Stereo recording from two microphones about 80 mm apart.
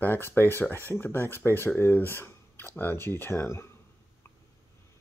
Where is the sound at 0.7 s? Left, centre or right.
Left.